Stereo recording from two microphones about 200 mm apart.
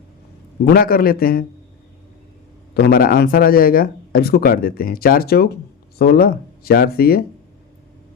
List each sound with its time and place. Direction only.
0.6 s speech: 50° left (ahead or behind)
2.7 s speech: 50° left (ahead or behind)